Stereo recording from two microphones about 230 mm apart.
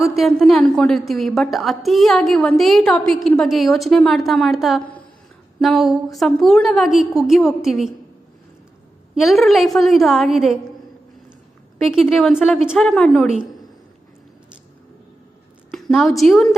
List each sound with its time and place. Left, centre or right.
0.2 s a woman's voice: centre
9.1 s a woman's voice: centre
11.9 s a woman's voice: centre
15.7 s a woman's voice: centre